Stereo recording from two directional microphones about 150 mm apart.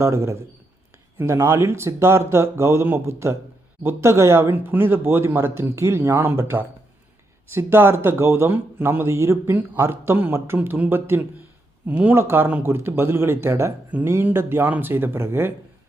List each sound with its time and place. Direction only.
0.0 s a man's voice: 20° right (ahead or behind)